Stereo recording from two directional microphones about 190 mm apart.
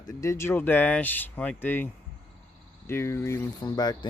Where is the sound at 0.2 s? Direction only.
15° left (ahead or behind).